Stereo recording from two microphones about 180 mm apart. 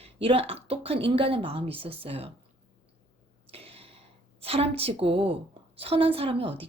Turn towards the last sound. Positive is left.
turn(degrees=-30)  # may be behind; listen again after turning